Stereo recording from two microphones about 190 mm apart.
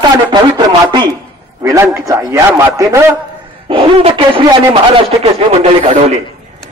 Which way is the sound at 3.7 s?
25° right (ahead or behind).